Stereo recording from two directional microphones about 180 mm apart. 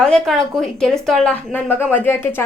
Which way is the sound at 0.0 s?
5° left (ahead or behind).